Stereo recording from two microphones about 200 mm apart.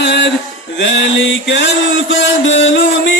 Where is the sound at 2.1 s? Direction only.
65° left (ahead or behind).